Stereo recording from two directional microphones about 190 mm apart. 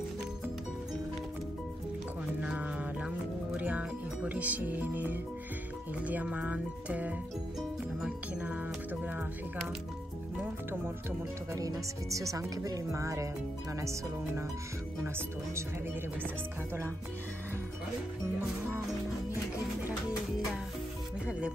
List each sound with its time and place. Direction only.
2.4 s music: 5° right (ahead or behind)
6.0 s speech: 10° right (ahead or behind)
10.4 s speech: 10° right (ahead or behind)